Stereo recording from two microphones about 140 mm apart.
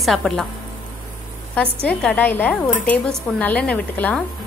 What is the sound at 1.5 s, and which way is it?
Speech, 10° left (ahead or behind).